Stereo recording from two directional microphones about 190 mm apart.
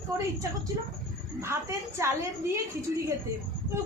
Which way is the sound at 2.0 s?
15° right (ahead or behind).